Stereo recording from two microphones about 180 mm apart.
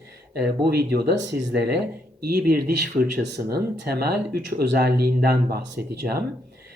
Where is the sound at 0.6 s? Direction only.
60° right (ahead or behind); by 1.7 s 75° right (ahead or behind).